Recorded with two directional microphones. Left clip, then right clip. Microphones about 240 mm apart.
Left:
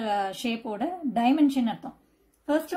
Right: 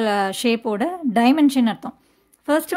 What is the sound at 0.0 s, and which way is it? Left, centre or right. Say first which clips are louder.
A woman's voice: right 8 dB; right.